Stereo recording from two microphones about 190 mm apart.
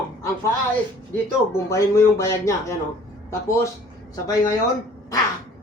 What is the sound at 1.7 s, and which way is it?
Speech, 15° left (ahead or behind).